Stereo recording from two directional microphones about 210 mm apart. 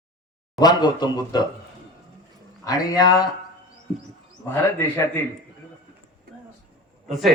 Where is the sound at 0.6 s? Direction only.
20° left (ahead or behind).